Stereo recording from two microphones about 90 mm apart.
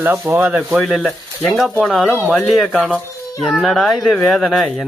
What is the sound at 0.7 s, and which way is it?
Speech, 5° left (ahead or behind).